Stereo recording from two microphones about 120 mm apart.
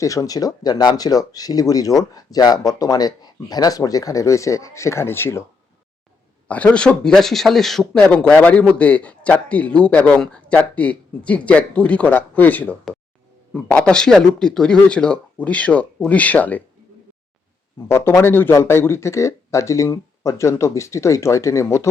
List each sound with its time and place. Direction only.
0.0 s speech: 30° left (ahead or behind)
6.5 s a man's voice: 10° left (ahead or behind)
17.7 s speech: 20° left (ahead or behind)